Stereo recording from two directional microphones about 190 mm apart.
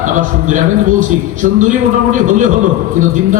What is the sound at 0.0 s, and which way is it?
A man's voice, 40° right (ahead or behind).